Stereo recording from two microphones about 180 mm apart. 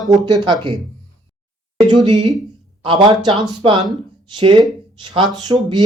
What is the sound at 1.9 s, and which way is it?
Speech, 25° right (ahead or behind).